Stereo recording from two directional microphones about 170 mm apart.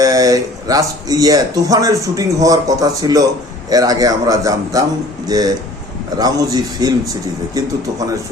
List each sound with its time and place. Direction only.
0.0 s speech: 20° right (ahead or behind)